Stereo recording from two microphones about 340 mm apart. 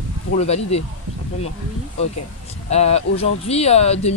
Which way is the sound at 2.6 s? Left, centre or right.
Centre.